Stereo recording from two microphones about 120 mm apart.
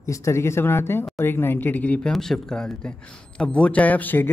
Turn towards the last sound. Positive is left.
turn(degrees=15)  # may be behind; listen again after turning